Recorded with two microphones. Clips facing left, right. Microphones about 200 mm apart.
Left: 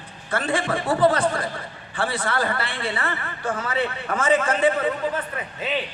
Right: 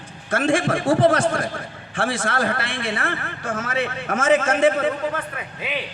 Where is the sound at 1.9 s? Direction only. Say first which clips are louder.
Right 2 dB; 90° right.